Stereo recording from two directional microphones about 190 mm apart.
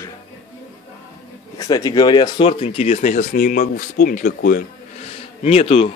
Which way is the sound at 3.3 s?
50° left (ahead or behind).